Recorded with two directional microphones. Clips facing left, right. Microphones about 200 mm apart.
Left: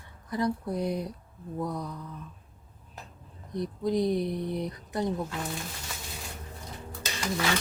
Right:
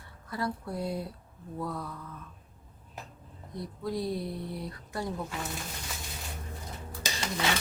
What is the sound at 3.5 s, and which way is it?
Speech, 20° left (ahead or behind).